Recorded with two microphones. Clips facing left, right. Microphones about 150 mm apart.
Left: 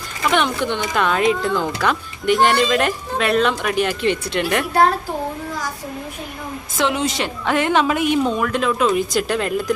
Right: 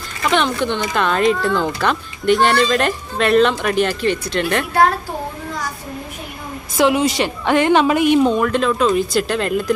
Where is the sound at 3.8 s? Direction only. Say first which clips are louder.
Right 1 dB; 20° left (ahead or behind).